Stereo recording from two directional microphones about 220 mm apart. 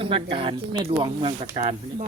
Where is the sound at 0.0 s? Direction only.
25° right (ahead or behind).